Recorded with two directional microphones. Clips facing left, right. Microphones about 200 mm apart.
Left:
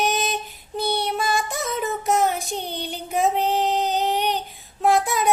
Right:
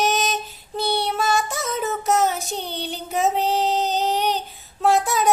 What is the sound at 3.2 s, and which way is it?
Female singing, 15° left (ahead or behind).